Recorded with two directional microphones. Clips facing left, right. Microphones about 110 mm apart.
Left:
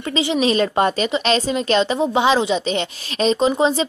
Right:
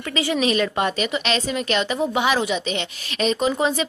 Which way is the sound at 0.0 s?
25° left (ahead or behind).